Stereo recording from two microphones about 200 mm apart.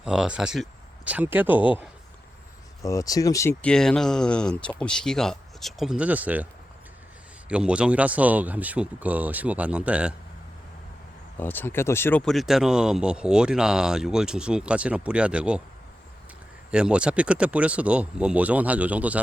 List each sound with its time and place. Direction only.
0.0 s speech: 5° right (ahead or behind)
2.8 s speech: 15° left (ahead or behind); by 10.2 s 5° right (ahead or behind)
11.3 s speech: 10° left (ahead or behind)
16.7 s speech: 5° right (ahead or behind)